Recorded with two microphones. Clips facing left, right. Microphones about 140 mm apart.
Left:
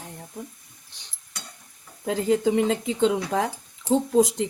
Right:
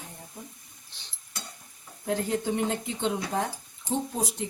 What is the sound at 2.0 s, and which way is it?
Speech, 90° left.